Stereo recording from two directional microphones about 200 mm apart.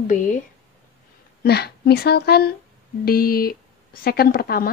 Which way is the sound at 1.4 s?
55° left (ahead or behind).